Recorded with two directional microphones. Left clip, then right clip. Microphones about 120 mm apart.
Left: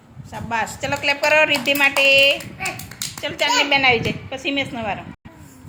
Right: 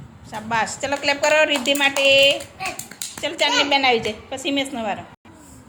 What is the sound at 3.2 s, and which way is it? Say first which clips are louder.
Speech: even; 25° right (ahead or behind).